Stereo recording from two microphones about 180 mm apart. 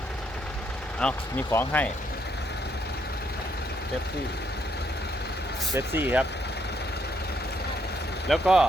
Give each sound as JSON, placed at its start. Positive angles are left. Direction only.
{"t": 0.9, "sound": "speech", "side_deg": 10}
{"t": 5.7, "sound": "speech", "side_deg": -10}
{"t": 8.3, "sound": "speech", "side_deg": -5}